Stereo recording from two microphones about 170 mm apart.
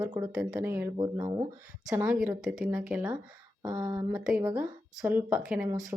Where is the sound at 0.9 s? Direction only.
25° right (ahead or behind).